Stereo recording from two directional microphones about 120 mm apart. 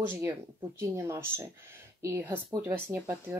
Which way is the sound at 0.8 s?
20° right (ahead or behind).